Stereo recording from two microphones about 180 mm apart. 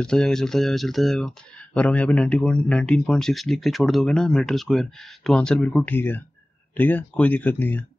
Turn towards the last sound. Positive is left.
turn(degrees=10)  # may be behind; listen again after turning